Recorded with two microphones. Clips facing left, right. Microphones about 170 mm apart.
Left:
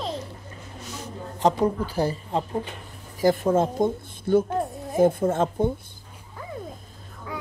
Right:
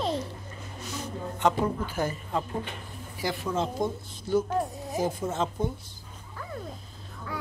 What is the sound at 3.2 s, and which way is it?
Speech, 45° left (ahead or behind).